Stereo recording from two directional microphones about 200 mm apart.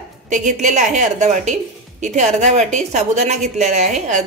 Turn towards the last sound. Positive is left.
turn(degrees=-35)  # may be behind; listen again after turning